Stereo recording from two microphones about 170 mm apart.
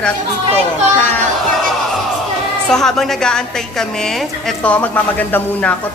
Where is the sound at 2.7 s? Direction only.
Centre (ahead or behind).